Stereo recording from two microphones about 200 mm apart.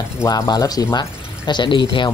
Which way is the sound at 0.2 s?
15° left (ahead or behind).